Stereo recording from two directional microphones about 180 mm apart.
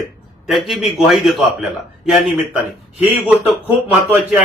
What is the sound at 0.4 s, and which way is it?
A man's voice, centre (ahead or behind).